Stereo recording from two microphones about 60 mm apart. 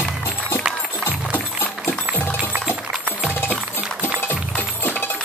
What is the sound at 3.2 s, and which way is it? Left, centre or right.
Music, left.